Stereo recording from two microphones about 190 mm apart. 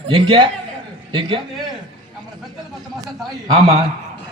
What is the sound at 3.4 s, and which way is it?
Speech, 20° right (ahead or behind).